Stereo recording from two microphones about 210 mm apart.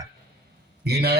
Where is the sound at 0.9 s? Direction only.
50° right (ahead or behind).